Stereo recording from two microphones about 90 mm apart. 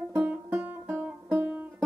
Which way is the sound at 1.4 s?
15° right (ahead or behind).